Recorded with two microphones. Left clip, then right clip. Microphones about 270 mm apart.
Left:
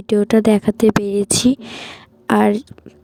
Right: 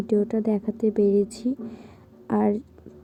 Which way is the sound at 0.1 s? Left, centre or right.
Left.